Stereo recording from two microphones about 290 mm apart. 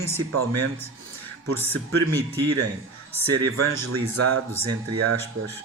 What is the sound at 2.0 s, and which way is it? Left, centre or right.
Speech, right.